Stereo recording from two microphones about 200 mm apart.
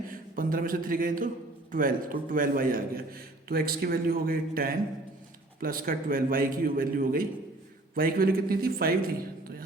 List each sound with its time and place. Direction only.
0.1 s a man's voice: 45° right (ahead or behind)